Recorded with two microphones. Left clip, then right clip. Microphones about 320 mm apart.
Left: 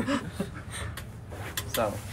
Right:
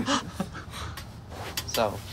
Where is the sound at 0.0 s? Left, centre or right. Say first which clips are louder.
Right 3 dB; centre.